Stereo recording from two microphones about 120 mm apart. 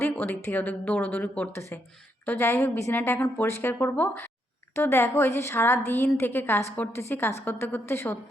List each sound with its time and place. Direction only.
0.0 s a woman's voice: 20° left (ahead or behind)